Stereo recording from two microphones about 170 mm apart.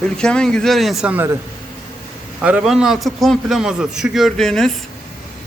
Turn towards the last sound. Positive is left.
turn(degrees=5)  # may be behind; listen again after turning